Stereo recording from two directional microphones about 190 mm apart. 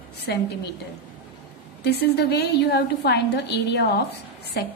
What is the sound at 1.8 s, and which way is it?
A woman's voice, 60° left (ahead or behind).